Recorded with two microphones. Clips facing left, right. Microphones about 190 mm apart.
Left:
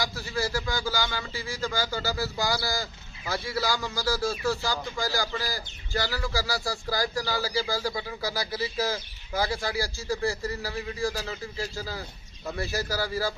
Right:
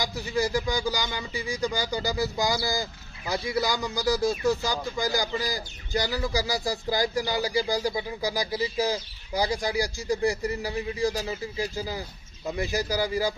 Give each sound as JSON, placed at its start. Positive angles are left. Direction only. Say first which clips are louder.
{"t": 0.0, "sound": "speech", "louder": "right 3 dB", "side_deg": -15}